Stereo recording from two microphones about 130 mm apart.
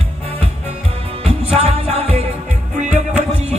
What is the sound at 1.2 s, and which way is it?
Music, 50° right (ahead or behind).